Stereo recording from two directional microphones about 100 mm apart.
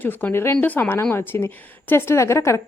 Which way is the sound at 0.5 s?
15° left (ahead or behind).